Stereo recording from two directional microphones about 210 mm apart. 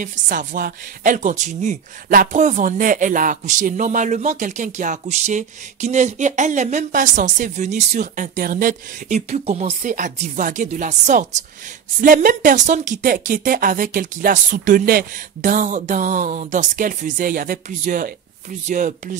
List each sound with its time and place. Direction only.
0.0 s speech: 40° right (ahead or behind)